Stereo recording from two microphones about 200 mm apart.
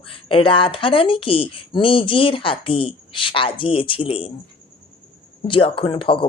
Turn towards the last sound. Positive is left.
turn(degrees=25)  # may be behind; listen again after turning